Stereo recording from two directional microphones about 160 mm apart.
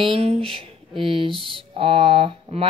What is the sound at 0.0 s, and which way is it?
Speech, 35° right (ahead or behind).